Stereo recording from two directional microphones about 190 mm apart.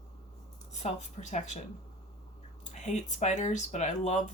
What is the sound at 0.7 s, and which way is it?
Speech, 35° left (ahead or behind).